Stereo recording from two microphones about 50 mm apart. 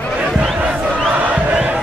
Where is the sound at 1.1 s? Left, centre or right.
Right.